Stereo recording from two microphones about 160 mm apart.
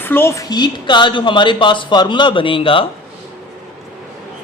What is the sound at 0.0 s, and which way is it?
Speech, 15° left (ahead or behind).